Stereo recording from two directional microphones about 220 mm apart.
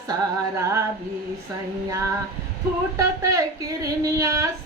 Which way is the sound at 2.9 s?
15° right (ahead or behind).